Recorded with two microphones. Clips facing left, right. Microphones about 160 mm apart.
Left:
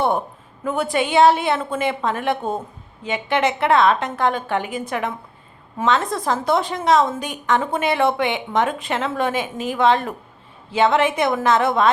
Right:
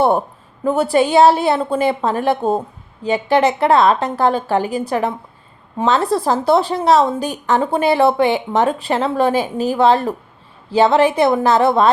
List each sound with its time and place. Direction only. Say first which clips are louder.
0.6 s a woman's voice: right 6 dB; 35° right (ahead or behind)